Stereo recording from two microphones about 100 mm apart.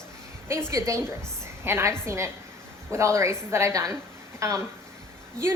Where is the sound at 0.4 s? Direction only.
25° right (ahead or behind).